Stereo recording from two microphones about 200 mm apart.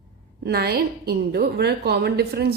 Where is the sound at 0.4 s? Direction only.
50° right (ahead or behind).